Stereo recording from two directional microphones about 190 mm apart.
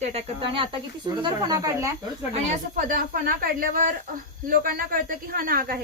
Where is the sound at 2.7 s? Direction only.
45° right (ahead or behind).